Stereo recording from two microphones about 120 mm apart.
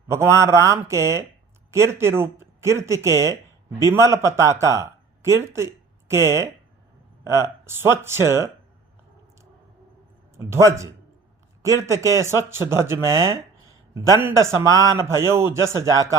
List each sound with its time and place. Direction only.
0.1 s a man's voice: 20° right (ahead or behind)
10.3 s a man's voice: 20° right (ahead or behind)